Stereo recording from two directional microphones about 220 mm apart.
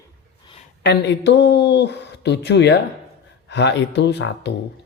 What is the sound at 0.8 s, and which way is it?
Speech, 50° left (ahead or behind).